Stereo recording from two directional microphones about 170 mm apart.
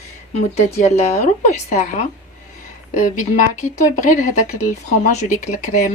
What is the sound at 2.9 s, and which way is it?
Speech, 50° left (ahead or behind).